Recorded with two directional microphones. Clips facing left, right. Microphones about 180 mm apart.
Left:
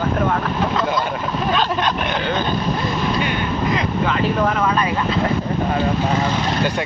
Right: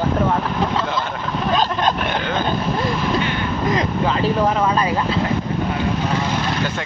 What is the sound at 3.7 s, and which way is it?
Speech, 35° right (ahead or behind).